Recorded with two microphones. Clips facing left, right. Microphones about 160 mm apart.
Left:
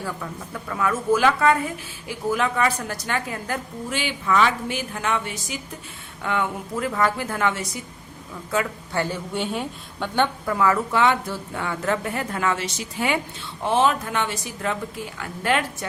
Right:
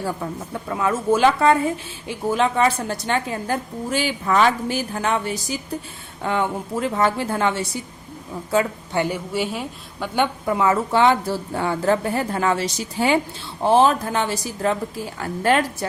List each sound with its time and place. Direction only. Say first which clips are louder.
0.0 s a woman's voice: right 5 dB; 30° right (ahead or behind)
9.0 s a woman's voice: right 3 dB; 15° right (ahead or behind)
9.3 s a woman's voice: right 2 dB; 5° right (ahead or behind)
10.4 s a woman's voice: right 2 dB; 25° right (ahead or behind)